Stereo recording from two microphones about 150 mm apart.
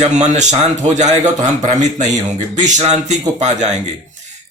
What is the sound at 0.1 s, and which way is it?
Speech, 50° right (ahead or behind).